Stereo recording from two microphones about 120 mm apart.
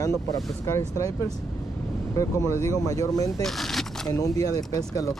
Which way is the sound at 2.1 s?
30° left (ahead or behind).